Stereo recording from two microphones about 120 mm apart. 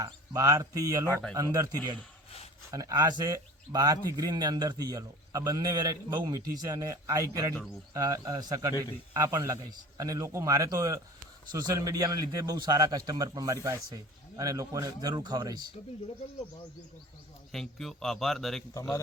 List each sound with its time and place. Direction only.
0.0 s a man's voice: 25° right (ahead or behind)
17.5 s a man's voice: 5° left (ahead or behind)
18.7 s a man's voice: 25° left (ahead or behind)